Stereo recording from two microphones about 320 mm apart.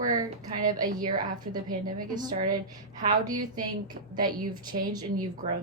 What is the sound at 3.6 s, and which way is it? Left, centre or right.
Speech, right.